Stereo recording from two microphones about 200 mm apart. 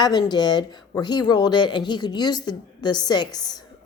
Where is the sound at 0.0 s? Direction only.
20° left (ahead or behind).